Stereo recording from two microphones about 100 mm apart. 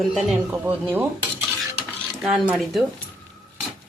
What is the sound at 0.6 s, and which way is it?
Speech, 20° right (ahead or behind).